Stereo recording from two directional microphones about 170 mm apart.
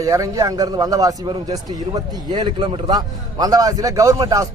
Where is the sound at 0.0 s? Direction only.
20° right (ahead or behind).